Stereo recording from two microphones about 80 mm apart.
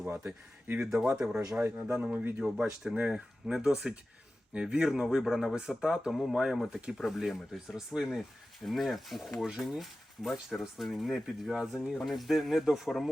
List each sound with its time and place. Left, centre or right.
0.0 s speech: centre
0.3 s speech: right
0.9 s speech: centre